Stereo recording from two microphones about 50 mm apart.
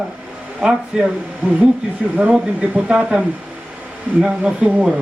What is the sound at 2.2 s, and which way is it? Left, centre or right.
Speech, right.